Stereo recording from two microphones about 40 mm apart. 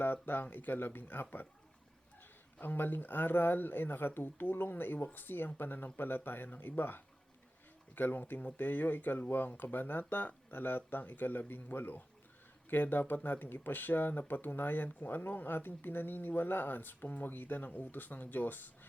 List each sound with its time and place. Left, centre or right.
0.0 s speech: left
2.6 s speech: left